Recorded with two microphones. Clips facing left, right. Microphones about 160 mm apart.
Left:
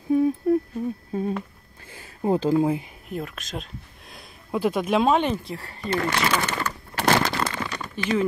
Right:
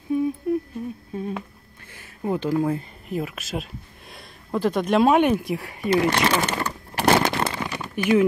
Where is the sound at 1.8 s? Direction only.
30° left (ahead or behind).